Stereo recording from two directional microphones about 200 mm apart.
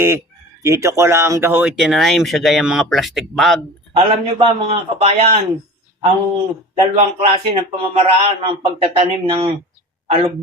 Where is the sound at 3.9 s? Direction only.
30° right (ahead or behind).